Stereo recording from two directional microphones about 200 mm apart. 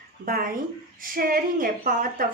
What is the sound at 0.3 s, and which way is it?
A woman's voice, 45° right (ahead or behind).